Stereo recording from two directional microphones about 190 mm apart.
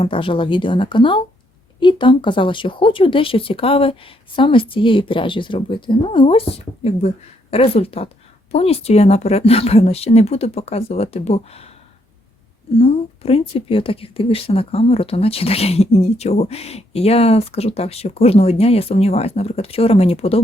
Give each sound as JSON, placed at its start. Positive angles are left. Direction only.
{"t": 0.0, "sound": "a woman's voice", "side_deg": 25}
{"t": 12.8, "sound": "a woman's voice", "side_deg": 30}